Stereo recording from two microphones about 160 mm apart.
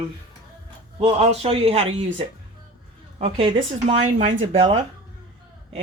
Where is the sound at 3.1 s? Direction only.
35° right (ahead or behind).